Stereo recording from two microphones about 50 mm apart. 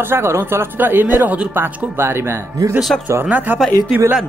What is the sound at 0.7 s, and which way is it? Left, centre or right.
Speech, right.